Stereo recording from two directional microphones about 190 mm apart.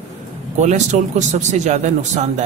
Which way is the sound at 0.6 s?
40° right (ahead or behind).